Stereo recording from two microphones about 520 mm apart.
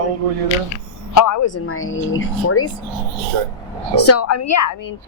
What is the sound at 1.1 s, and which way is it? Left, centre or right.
A woman's voice, left.